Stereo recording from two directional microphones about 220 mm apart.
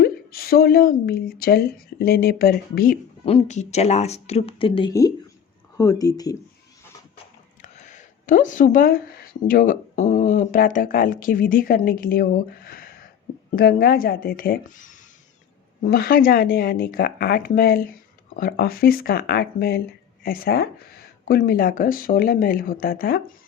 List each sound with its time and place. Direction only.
0.0 s a woman's voice: 45° left (ahead or behind)
3.2 s speech: 30° left (ahead or behind)
7.6 s a woman's voice: 35° left (ahead or behind)